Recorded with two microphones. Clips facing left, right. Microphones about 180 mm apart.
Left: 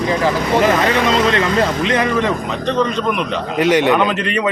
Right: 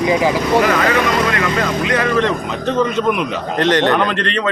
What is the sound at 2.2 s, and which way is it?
Speech, 5° left (ahead or behind).